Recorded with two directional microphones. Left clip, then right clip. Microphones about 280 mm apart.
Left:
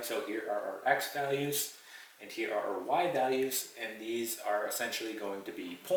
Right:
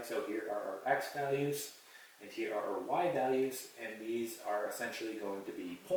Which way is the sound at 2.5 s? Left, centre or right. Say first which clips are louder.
Left 4 dB; centre.